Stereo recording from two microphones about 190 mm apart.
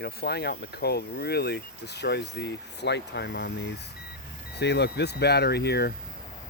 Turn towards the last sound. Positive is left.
turn(degrees=60)  # may be behind; listen again after turning